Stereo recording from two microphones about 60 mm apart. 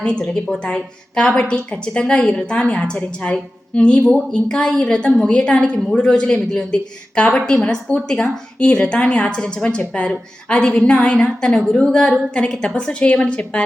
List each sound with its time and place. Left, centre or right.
0.0 s a woman's voice: centre